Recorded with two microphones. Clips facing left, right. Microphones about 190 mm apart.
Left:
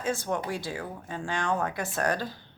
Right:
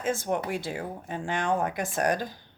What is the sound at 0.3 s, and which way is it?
A woman's voice, 15° right (ahead or behind).